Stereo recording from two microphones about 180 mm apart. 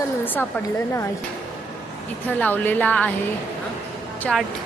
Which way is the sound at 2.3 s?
10° left (ahead or behind).